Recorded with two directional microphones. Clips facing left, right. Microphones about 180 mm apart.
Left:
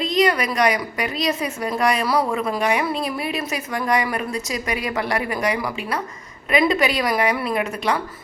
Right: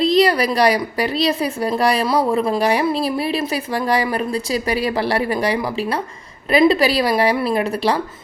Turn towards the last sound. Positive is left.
turn(degrees=-35)  # may be behind; listen again after turning